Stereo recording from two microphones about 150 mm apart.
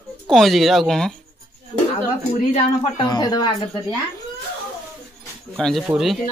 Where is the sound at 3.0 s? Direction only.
25° left (ahead or behind).